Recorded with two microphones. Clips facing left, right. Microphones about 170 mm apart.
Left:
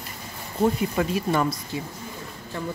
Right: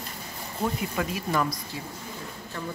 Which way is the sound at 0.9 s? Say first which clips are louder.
Left 4 dB; 30° left (ahead or behind).